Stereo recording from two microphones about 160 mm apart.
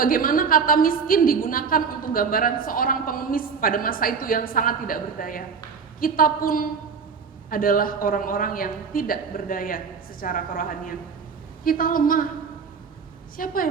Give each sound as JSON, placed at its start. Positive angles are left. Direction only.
{"t": 0.0, "sound": "a woman's voice", "side_deg": 60}
{"t": 13.3, "sound": "a woman's voice", "side_deg": 60}